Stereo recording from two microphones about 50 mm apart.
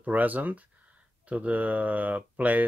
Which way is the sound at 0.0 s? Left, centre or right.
Right.